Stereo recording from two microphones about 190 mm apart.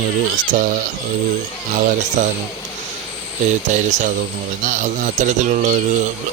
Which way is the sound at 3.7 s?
40° right (ahead or behind).